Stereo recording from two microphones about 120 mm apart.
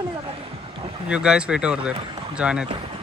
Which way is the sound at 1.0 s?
10° right (ahead or behind).